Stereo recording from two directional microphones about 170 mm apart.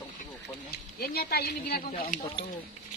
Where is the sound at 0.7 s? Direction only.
65° left (ahead or behind).